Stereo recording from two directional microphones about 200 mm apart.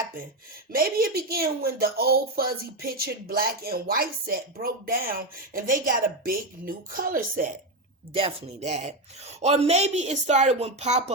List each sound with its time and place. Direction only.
0.7 s speech: 50° right (ahead or behind)
8.1 s speech: 30° right (ahead or behind)